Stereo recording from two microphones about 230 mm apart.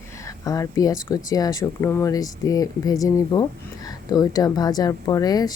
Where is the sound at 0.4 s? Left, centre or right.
Centre.